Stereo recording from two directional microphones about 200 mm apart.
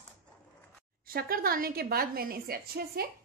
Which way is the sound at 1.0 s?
45° right (ahead or behind).